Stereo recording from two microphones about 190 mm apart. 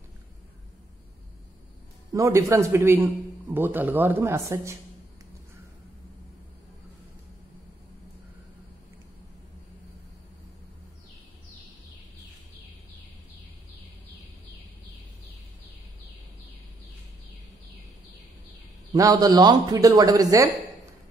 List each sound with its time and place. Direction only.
2.1 s a man's voice: 15° right (ahead or behind)
18.9 s speech: 20° right (ahead or behind)